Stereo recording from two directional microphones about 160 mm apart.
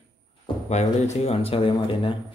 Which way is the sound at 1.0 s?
40° left (ahead or behind).